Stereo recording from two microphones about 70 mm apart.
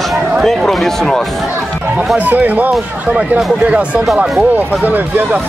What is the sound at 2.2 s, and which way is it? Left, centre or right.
Speech, right.